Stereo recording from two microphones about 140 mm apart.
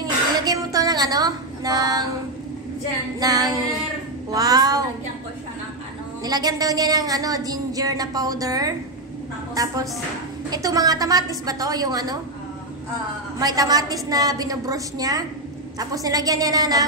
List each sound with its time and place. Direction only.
0.0 s a sound: 25° right (ahead or behind)
3.2 s a woman's voice: 25° right (ahead or behind)
6.2 s a woman's voice: 30° right (ahead or behind)
13.4 s a woman's voice: 25° right (ahead or behind)